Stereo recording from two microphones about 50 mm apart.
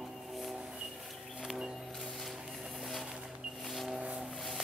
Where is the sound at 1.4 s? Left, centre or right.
Centre.